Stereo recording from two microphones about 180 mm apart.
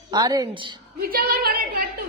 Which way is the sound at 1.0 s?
55° right (ahead or behind).